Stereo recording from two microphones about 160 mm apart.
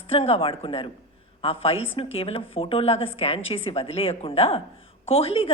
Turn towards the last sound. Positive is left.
turn(degrees=40)  # may be behind; listen again after turning